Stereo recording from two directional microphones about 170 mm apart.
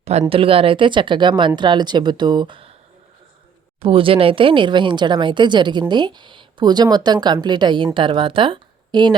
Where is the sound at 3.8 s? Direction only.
30° right (ahead or behind).